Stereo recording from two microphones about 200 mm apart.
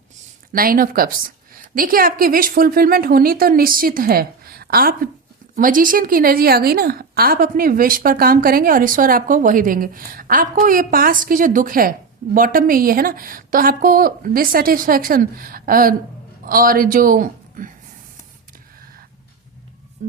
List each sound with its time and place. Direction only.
0.5 s a woman's voice: 45° right (ahead or behind)